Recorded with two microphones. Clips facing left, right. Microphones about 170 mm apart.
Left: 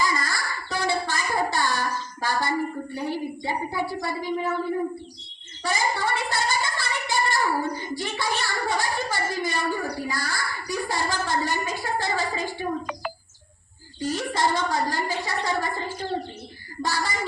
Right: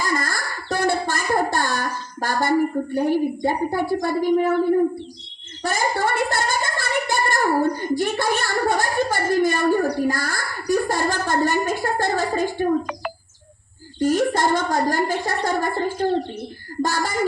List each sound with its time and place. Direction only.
0.0 s a sound: 50° right (ahead or behind)
2.2 s speech: 50° right (ahead or behind)
5.6 s speech: 50° right (ahead or behind)
14.0 s speech: 50° right (ahead or behind)